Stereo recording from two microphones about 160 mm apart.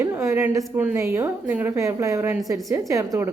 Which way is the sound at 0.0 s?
15° right (ahead or behind).